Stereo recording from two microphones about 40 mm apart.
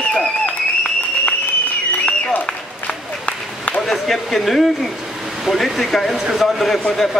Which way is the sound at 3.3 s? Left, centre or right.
Left.